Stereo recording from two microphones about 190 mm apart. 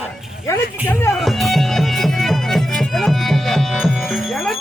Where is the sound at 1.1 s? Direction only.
Centre (ahead or behind).